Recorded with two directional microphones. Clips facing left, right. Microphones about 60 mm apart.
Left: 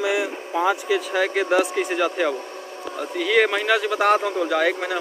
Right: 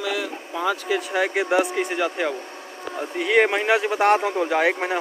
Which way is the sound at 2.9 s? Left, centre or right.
Centre.